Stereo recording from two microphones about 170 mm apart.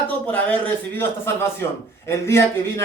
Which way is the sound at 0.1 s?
10° left (ahead or behind).